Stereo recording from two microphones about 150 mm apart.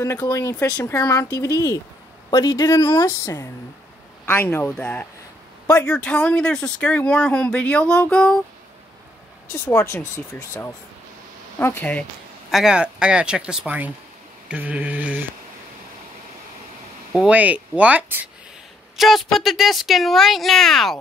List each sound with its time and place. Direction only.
0.0 s speech: 20° left (ahead or behind)
9.5 s speech: 15° left (ahead or behind)
12.4 s speech: 5° right (ahead or behind)
17.1 s speech: 5° right (ahead or behind)
18.9 s speech: centre (ahead or behind)